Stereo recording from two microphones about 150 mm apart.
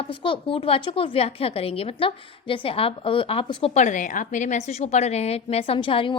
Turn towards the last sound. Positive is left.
turn(degrees=35)  # may be behind; listen again after turning